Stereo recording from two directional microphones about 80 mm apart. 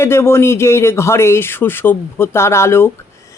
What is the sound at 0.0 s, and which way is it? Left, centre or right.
Speech, left.